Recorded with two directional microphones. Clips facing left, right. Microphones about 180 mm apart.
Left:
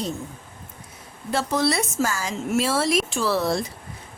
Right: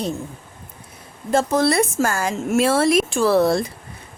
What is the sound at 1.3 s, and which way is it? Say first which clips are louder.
Speech: right 5 dB; 50° right (ahead or behind).